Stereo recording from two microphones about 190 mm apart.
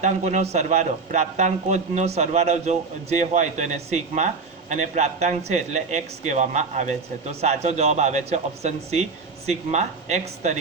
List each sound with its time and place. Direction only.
0.0 s a man's voice: 40° right (ahead or behind)